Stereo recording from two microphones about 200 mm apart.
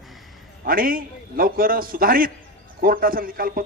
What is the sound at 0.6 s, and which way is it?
A man's voice, 45° right (ahead or behind).